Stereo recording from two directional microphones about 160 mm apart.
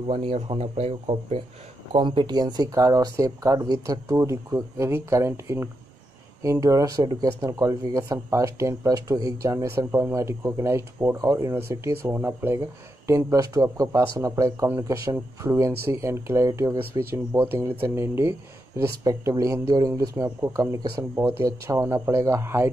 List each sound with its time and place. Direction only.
0.0 s speech: 35° right (ahead or behind); by 22.7 s 15° right (ahead or behind)